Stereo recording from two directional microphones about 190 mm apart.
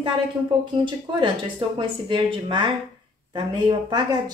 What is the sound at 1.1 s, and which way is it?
Speech, 25° right (ahead or behind).